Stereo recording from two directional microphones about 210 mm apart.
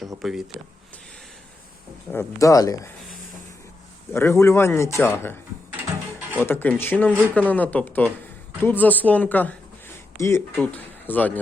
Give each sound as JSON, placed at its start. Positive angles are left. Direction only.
{"t": 0.2, "sound": "speech", "side_deg": 0}
{"t": 2.1, "sound": "speech", "side_deg": 15}
{"t": 4.1, "sound": "speech", "side_deg": 10}
{"t": 6.4, "sound": "speech", "side_deg": 10}